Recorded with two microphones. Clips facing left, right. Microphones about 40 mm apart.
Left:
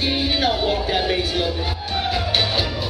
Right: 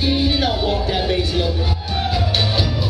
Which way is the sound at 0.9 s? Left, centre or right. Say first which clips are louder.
Right 1 dB; centre.